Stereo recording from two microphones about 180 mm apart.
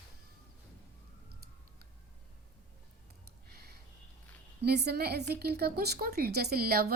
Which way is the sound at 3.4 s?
60° right (ahead or behind).